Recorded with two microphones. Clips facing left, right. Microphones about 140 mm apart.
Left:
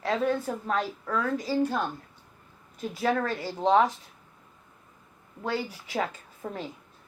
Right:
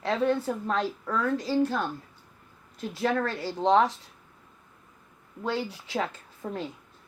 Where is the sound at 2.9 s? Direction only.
5° left (ahead or behind).